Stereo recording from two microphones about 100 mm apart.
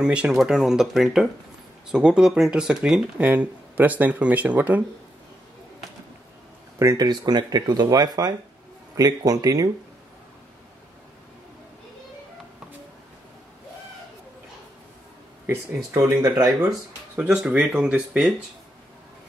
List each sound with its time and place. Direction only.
0.0 s speech: 10° right (ahead or behind)
6.8 s speech: 35° right (ahead or behind)
15.4 s speech: 25° right (ahead or behind)
17.1 s speech: 15° right (ahead or behind)